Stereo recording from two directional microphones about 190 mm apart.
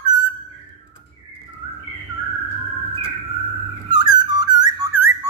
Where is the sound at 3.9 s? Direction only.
20° right (ahead or behind).